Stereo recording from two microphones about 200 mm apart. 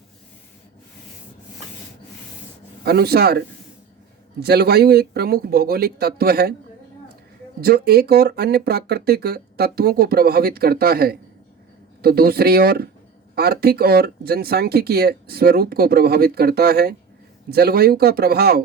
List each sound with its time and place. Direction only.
2.8 s speech: 50° right (ahead or behind)
7.6 s speech: 50° right (ahead or behind)